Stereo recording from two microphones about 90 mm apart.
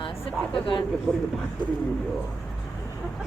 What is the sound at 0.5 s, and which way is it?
Speech, 65° left (ahead or behind).